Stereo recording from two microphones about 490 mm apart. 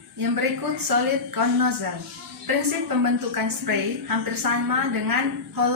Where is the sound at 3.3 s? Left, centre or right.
Right.